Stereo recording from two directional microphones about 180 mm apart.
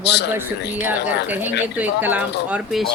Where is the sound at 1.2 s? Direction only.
10° right (ahead or behind).